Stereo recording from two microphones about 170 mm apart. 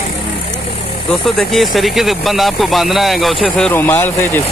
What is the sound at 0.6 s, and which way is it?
Vehicle, 35° left (ahead or behind).